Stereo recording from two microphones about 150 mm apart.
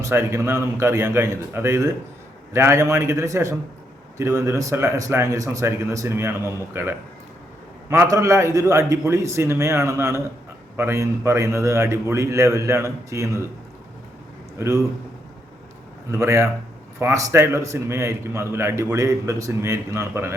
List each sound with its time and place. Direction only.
0.0 s a man's voice: 15° right (ahead or behind)
16.1 s a man's voice: 20° right (ahead or behind)